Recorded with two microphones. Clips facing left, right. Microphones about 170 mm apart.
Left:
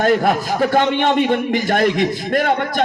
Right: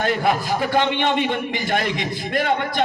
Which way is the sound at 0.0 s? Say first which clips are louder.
Left 5 dB; 45° left (ahead or behind).